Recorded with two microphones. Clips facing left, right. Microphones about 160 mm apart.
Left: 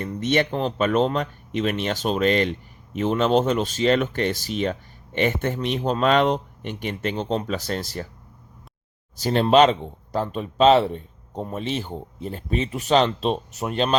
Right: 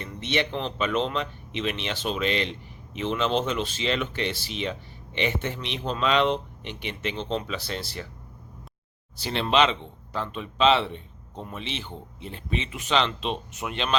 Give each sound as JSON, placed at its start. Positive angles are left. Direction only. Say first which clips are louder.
{"t": 0.0, "sound": "speech", "louder": "left 6 dB", "side_deg": 45}
{"t": 9.1, "sound": "speech", "louder": "left 7 dB", "side_deg": 45}